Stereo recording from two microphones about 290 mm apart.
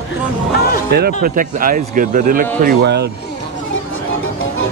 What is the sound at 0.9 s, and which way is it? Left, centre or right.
Speech, right.